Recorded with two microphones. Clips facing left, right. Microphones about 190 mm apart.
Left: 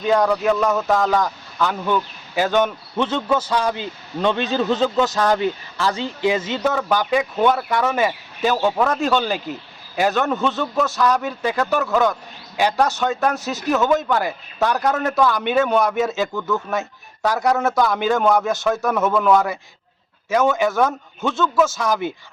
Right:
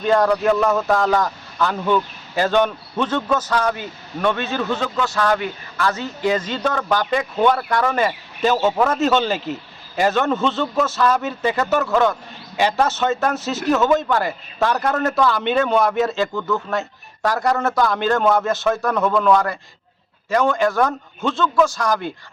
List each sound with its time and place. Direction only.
0.0 s speech: centre (ahead or behind)
3.8 s a man's voice: 25° left (ahead or behind); by 22.1 s 5° left (ahead or behind)